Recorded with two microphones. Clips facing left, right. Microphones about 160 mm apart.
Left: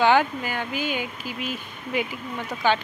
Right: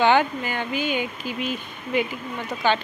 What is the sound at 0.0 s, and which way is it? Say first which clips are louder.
Speech: right 1 dB; 5° left (ahead or behind).